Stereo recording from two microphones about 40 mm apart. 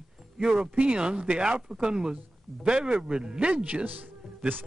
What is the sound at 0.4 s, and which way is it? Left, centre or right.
Speech, right.